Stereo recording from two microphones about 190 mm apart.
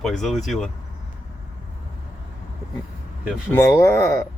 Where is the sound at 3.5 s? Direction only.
15° left (ahead or behind).